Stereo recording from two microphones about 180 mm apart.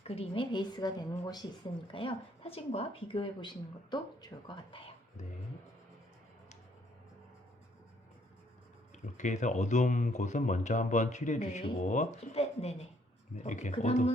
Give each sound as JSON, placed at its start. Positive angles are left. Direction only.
{"t": 0.0, "sound": "speech", "side_deg": 35}
{"t": 5.2, "sound": "speech", "side_deg": 40}
{"t": 9.1, "sound": "speech", "side_deg": 40}